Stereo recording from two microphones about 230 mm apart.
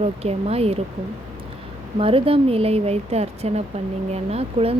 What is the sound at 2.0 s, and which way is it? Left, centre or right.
Speech, right.